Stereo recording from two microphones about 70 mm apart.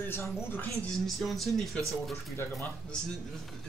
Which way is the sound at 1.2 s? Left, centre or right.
Centre.